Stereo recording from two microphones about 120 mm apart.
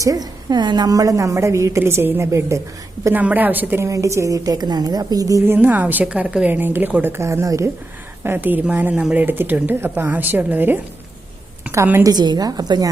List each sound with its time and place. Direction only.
0.0 s a woman's voice: 30° right (ahead or behind); by 3.8 s 15° right (ahead or behind)
3.8 s a woman's voice: 25° right (ahead or behind)
5.5 s a woman's voice: 15° right (ahead or behind)
12.0 s a woman's voice: 35° right (ahead or behind)